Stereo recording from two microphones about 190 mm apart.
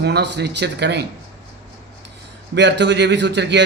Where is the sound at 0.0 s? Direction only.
60° right (ahead or behind).